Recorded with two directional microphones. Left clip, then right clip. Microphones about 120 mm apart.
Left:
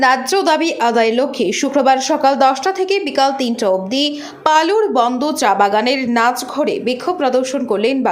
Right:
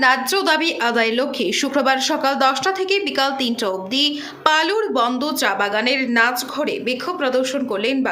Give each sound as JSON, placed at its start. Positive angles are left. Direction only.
{"t": 0.0, "sound": "a woman's voice", "side_deg": 30}